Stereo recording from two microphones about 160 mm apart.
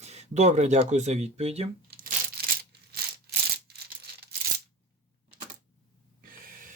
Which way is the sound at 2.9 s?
80° right.